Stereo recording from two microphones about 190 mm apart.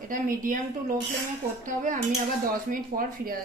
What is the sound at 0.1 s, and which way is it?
Speech, 45° right (ahead or behind).